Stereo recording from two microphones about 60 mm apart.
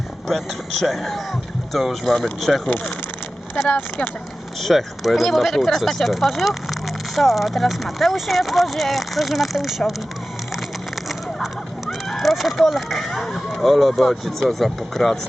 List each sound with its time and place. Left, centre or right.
0.3 s speech: centre
4.6 s speech: centre
11.9 s speech: centre